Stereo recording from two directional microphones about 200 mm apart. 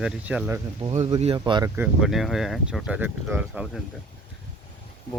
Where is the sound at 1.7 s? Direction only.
5° right (ahead or behind).